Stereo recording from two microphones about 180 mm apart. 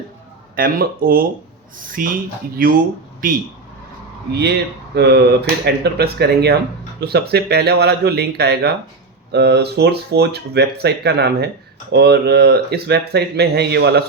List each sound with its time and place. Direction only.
0.5 s speech: 55° right (ahead or behind)
3.2 s speech: 50° right (ahead or behind)
4.3 s speech: 65° right (ahead or behind)